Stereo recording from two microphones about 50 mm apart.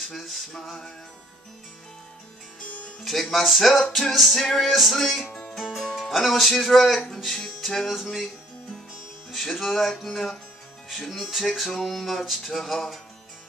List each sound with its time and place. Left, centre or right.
0.1 s music: centre
3.0 s music: centre
5.2 s music: left
5.5 s music: centre
5.9 s speech: centre
7.6 s music: centre
9.3 s music: centre